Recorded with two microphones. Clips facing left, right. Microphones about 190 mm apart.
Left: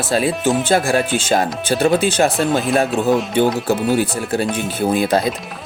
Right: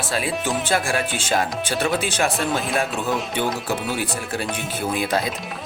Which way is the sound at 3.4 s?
Centre (ahead or behind).